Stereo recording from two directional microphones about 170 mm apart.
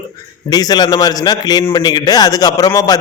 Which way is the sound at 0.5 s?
25° left (ahead or behind).